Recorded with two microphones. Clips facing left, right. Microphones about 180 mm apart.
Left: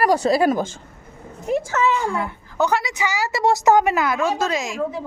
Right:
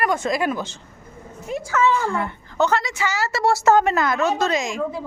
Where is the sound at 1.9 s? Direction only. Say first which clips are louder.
Even; 15° left (ahead or behind).